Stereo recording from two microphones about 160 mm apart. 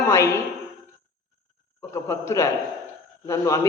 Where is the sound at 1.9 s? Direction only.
20° left (ahead or behind).